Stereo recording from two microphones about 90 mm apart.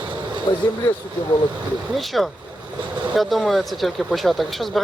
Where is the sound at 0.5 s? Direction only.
65° left (ahead or behind).